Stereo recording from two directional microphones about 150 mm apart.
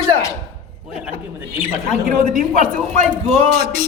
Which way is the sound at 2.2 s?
60° right (ahead or behind).